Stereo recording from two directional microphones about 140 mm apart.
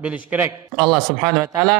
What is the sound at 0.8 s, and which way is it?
Speech, centre (ahead or behind).